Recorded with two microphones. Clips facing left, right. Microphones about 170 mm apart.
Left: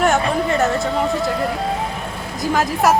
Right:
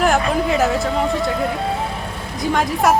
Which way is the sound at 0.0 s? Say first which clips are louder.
Even; centre (ahead or behind).